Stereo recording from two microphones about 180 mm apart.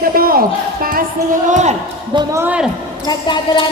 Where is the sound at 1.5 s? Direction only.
40° right (ahead or behind).